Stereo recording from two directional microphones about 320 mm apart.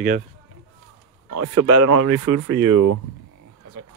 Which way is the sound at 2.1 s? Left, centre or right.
Right.